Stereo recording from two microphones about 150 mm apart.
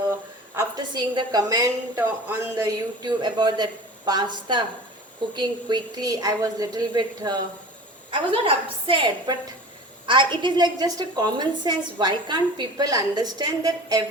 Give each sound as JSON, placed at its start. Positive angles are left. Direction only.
{"t": 0.5, "sound": "a woman's voice", "side_deg": -30}
{"t": 3.0, "sound": "a woman's voice", "side_deg": -30}
{"t": 8.1, "sound": "a woman's voice", "side_deg": -35}